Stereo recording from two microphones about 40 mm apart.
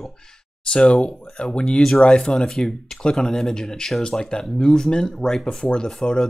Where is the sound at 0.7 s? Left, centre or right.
Left.